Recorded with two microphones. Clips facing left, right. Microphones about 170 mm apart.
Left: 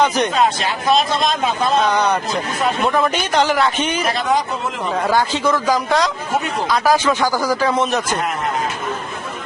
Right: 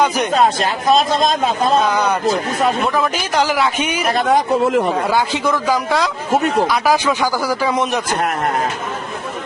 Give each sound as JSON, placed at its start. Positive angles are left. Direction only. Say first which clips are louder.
{"t": 0.3, "sound": "speech", "louder": "right 2 dB", "side_deg": -40}
{"t": 1.9, "sound": "a man's voice", "louder": "right 1 dB", "side_deg": -5}
{"t": 4.1, "sound": "a man's voice", "louder": "right 4 dB", "side_deg": -55}
{"t": 5.0, "sound": "a man's voice", "louder": "even", "side_deg": -15}